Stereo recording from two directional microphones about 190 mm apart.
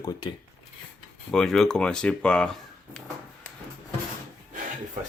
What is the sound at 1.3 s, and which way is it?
Speech, centre (ahead or behind).